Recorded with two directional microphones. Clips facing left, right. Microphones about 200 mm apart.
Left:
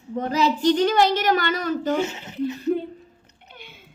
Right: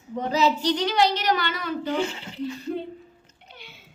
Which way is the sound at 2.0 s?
20° left (ahead or behind).